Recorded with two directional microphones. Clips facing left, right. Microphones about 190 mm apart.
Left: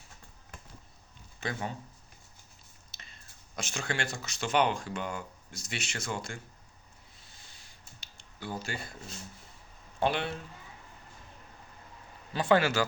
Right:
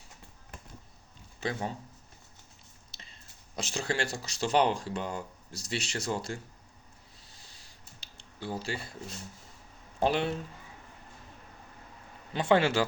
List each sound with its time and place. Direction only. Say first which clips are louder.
1.4 s speech: right 2 dB; 30° right (ahead or behind)
2.9 s speech: even; 30° right (ahead or behind)
7.2 s a sound: right 1 dB; 35° right (ahead or behind)
10.0 s speech: right 2 dB; 40° right (ahead or behind)
12.3 s a man's voice: right 1 dB; 25° right (ahead or behind)